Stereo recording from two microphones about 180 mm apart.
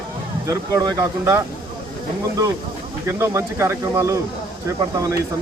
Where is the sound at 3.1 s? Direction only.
15° right (ahead or behind).